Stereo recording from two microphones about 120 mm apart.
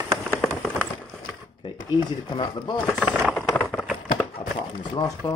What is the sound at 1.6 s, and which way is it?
Speech, 40° left (ahead or behind).